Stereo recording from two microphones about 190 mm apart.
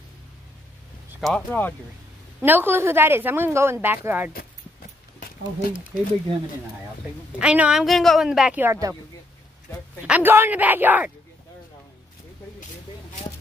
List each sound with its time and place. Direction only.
1.2 s speech: 5° left (ahead or behind)
2.4 s speech: 10° right (ahead or behind)
5.2 s speech: 45° left (ahead or behind)
7.3 s speech: 5° right (ahead or behind)
10.0 s speech: 10° right (ahead or behind)